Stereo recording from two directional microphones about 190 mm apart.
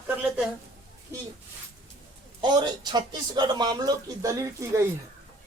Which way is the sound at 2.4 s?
25° right (ahead or behind).